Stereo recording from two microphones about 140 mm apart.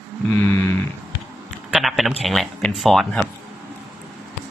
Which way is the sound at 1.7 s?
Centre (ahead or behind).